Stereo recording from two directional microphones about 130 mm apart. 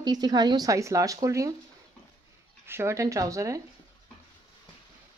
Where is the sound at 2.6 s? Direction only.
20° right (ahead or behind).